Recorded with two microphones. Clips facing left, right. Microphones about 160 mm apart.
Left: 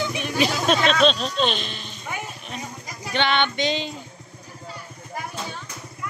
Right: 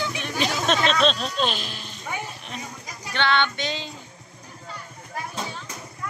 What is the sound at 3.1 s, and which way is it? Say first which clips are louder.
Music: left 1 dB; 20° left (ahead or behind).